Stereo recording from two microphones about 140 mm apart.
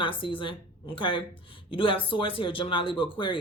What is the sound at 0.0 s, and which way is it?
Speech, 35° left (ahead or behind).